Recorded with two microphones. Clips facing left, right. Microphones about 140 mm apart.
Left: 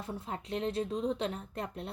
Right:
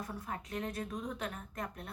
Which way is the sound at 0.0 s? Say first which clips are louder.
Left 2 dB; 25° left (ahead or behind).